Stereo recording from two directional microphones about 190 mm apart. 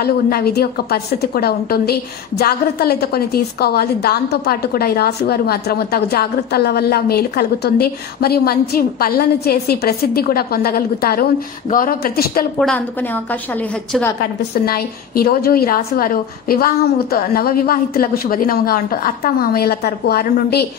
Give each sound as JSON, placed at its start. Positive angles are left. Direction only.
{"t": 0.0, "sound": "a woman's voice", "side_deg": 55}
{"t": 12.5, "sound": "a woman's voice", "side_deg": 5}
{"t": 14.2, "sound": "a woman's voice", "side_deg": 55}